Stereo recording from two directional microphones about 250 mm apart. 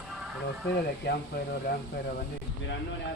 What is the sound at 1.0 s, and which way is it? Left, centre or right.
Speech, left.